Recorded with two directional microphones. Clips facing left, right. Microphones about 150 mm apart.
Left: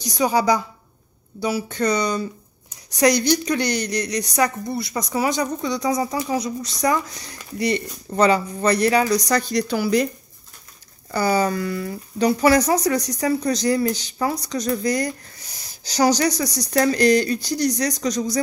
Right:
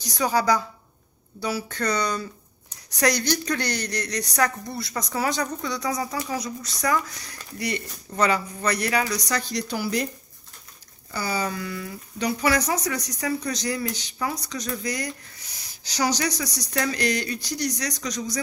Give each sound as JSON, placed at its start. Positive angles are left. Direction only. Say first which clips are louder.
{"t": 0.2, "sound": "a woman's voice", "louder": "left 3 dB", "side_deg": 15}
{"t": 9.5, "sound": "a woman's voice", "louder": "left 7 dB", "side_deg": 70}
{"t": 11.1, "sound": "speech", "louder": "left 8 dB", "side_deg": 50}